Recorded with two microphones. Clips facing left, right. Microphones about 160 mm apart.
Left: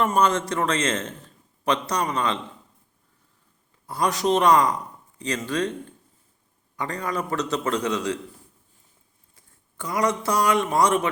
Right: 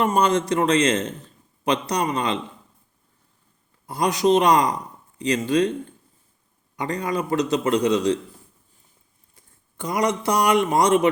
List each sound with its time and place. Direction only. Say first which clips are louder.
0.2 s a man's voice: right 2 dB; 15° right (ahead or behind)
3.8 s a man's voice: right 3 dB; 15° right (ahead or behind)
6.7 s a man's voice: right 3 dB; 15° right (ahead or behind)
9.3 s speech: right 1 dB; 20° right (ahead or behind)